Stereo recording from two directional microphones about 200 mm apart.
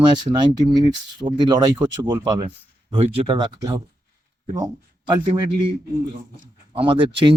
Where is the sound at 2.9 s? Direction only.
30° right (ahead or behind).